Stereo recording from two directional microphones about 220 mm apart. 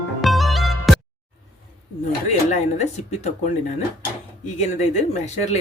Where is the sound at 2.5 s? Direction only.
30° left (ahead or behind).